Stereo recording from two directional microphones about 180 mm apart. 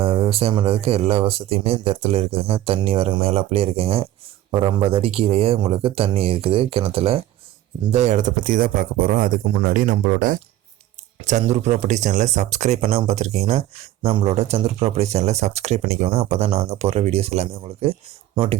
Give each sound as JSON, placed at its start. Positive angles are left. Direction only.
{"t": 0.0, "sound": "speech", "side_deg": -30}